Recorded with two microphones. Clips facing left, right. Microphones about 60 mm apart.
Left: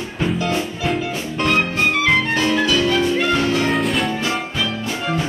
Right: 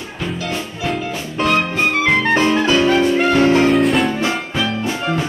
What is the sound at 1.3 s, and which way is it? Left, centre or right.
Music, centre.